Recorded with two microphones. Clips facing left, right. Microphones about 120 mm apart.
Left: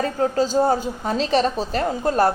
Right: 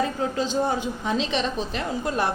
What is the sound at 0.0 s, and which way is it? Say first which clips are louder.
A woman's voice: left 4 dB; 40° left (ahead or behind).